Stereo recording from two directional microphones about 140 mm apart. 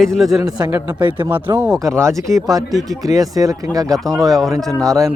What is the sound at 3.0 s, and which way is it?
Speech, 25° right (ahead or behind).